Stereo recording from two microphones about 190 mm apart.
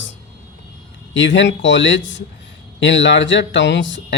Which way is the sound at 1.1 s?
70° left (ahead or behind).